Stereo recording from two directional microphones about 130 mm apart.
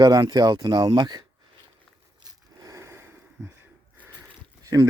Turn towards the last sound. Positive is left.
turn(degrees=-25)  # may be behind; listen again after turning